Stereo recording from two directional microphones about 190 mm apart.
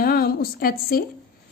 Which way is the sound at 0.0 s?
50° left (ahead or behind).